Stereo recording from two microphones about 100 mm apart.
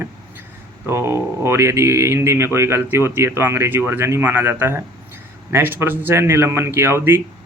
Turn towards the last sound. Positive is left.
turn(degrees=-25)  # may be behind; listen again after turning